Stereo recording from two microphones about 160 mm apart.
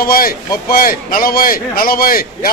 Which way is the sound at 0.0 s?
65° left (ahead or behind).